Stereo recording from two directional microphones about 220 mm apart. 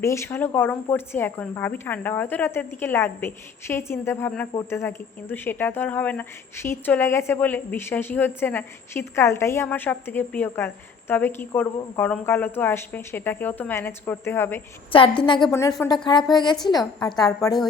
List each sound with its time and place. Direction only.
0.0 s a woman's voice: 10° left (ahead or behind)
14.9 s a woman's voice: 25° left (ahead or behind)
15.5 s a woman's voice: 15° left (ahead or behind)